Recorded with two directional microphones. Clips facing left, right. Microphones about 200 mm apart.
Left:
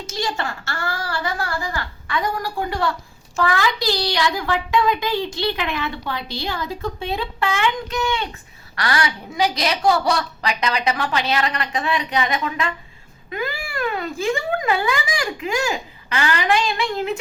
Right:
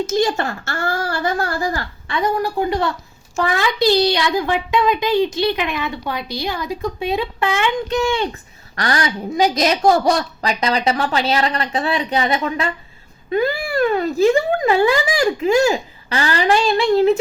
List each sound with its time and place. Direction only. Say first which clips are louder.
0.0 s a woman's voice: right 8 dB; 45° right (ahead or behind)
2.0 s a child's voice: right 5 dB; 20° right (ahead or behind)
7.9 s a woman's voice: right 5 dB; 35° right (ahead or behind)